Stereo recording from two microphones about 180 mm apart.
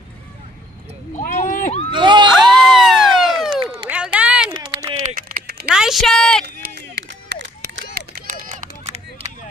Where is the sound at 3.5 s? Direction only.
25° right (ahead or behind).